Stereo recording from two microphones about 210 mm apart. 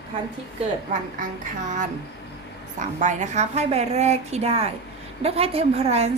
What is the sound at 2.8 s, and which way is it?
A woman's voice, 35° right (ahead or behind).